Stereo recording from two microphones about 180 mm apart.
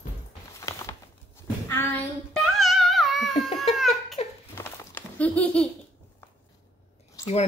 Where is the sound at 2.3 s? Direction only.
Centre (ahead or behind).